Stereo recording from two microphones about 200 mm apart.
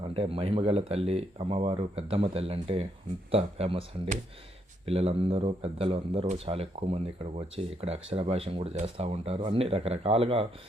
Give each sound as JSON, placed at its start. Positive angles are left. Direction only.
{"t": 0.1, "sound": "speech", "side_deg": -30}